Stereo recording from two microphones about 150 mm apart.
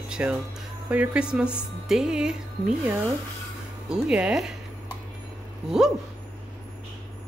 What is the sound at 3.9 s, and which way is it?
Speech, 5° right (ahead or behind).